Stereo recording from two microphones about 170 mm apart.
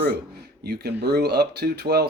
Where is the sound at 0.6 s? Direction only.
75° right (ahead or behind).